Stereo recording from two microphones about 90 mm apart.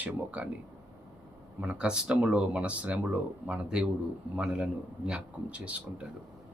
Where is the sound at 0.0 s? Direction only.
15° right (ahead or behind).